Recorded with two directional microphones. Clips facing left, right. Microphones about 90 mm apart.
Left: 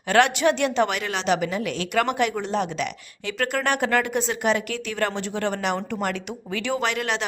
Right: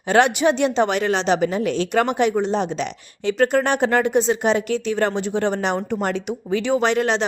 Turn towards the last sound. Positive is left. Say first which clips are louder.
# right 6 dB
turn(degrees=-30)  # may be behind; listen again after turning